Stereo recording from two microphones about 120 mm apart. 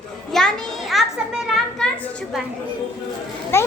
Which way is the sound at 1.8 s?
10° left (ahead or behind).